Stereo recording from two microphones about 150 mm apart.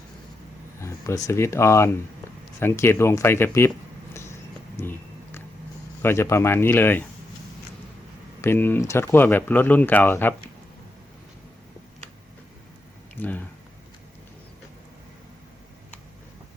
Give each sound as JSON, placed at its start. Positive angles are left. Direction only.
{"t": 0.8, "sound": "speech", "side_deg": 20}
{"t": 4.1, "sound": "vehicle", "side_deg": 20}
{"t": 4.8, "sound": "a sound", "side_deg": 15}
{"t": 6.0, "sound": "speech", "side_deg": 15}
{"t": 8.4, "sound": "speech", "side_deg": 15}
{"t": 13.1, "sound": "a sound", "side_deg": 10}